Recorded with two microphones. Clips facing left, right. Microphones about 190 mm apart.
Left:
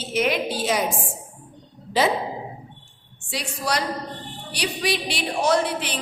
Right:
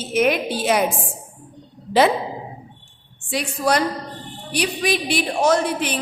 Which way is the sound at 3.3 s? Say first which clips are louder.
Right 6 dB; 55° right (ahead or behind).